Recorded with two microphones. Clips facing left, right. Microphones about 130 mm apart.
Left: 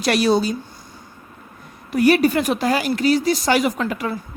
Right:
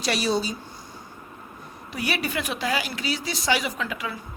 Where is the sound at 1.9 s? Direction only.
45° left (ahead or behind).